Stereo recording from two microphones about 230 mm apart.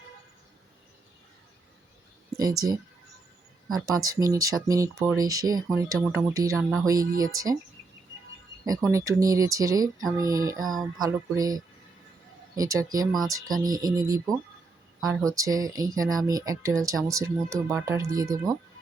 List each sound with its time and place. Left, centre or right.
2.4 s speech: centre
3.8 s speech: centre
8.9 s speech: centre
10.7 s music: centre
11.0 s speech: centre
15.0 s music: centre
15.4 s speech: centre